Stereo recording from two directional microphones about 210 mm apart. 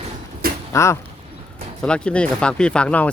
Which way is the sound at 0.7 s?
15° left (ahead or behind).